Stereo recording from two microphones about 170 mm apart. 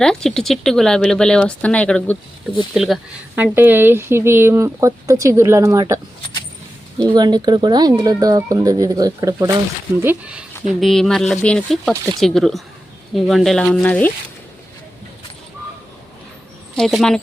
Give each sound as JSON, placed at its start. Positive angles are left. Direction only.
{"t": 0.0, "sound": "speech", "side_deg": 5}
{"t": 7.1, "sound": "speech", "side_deg": -25}
{"t": 10.0, "sound": "speech", "side_deg": -10}
{"t": 10.8, "sound": "speech", "side_deg": 0}
{"t": 16.7, "sound": "speech", "side_deg": 0}